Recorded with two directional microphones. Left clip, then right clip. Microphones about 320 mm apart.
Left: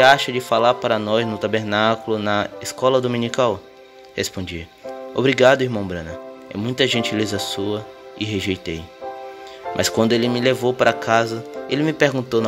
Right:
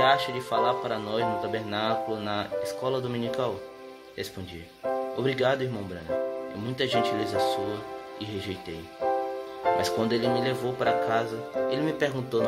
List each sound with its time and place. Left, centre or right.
0.0 s a man's voice: left